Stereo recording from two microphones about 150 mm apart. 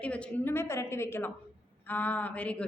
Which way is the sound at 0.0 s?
10° left (ahead or behind).